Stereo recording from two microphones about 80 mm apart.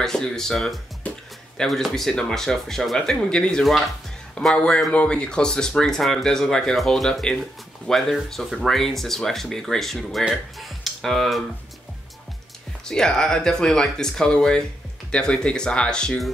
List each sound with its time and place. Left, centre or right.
0.0 s speech: centre
1.0 s music: centre
1.6 s speech: centre
12.8 s speech: centre